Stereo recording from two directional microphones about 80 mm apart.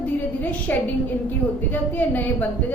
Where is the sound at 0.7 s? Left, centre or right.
Left.